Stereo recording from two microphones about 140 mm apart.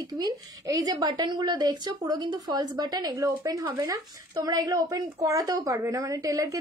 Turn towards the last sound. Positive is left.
turn(degrees=-25)  # may be behind; listen again after turning